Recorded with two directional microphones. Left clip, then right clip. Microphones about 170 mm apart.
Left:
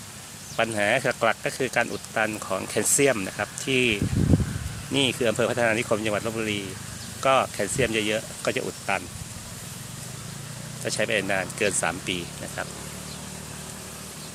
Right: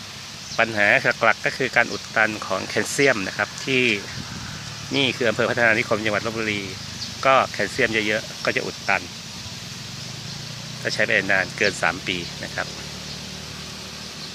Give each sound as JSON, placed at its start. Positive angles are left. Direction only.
{"t": 0.5, "sound": "speech", "side_deg": 10}
{"t": 10.8, "sound": "speech", "side_deg": 15}